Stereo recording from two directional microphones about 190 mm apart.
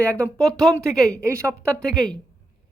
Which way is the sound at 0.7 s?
15° right (ahead or behind).